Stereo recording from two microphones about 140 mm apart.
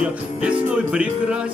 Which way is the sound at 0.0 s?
10° right (ahead or behind).